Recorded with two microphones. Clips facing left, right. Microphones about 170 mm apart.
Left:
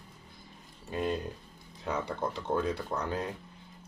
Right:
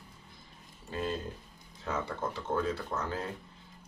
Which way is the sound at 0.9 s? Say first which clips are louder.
Left 3 dB; 15° left (ahead or behind).